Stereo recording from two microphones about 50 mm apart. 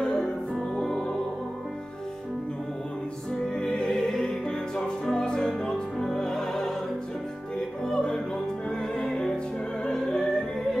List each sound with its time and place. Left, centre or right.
0.0 s music: centre
3.5 s music: centre